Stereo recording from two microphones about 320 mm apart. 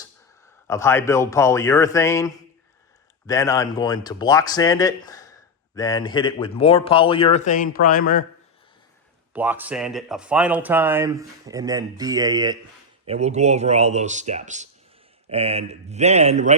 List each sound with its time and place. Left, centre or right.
0.4 s speech: centre; by 8.2 s left
9.3 s speech: centre; by 16.6 s right